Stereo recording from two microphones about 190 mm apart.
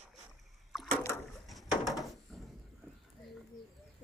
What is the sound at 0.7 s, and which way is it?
Rowboat, centre (ahead or behind).